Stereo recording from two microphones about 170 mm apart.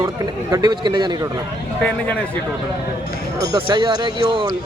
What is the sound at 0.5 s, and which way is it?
Speech, 25° right (ahead or behind).